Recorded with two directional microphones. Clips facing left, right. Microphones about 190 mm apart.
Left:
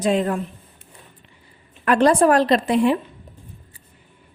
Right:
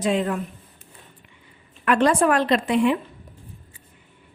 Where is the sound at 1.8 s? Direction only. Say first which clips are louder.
Left 3 dB; 35° left (ahead or behind).